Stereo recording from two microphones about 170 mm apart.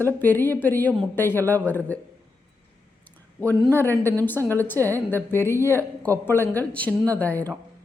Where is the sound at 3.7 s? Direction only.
15° left (ahead or behind).